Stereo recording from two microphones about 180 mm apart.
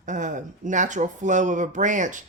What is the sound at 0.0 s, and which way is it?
Speech, 45° right (ahead or behind).